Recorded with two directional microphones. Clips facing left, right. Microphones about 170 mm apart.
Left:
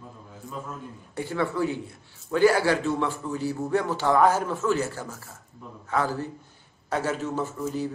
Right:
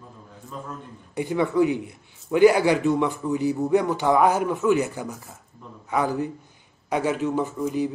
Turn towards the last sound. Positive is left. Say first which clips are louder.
# right 4 dB
turn(degrees=-15)  # may be behind; listen again after turning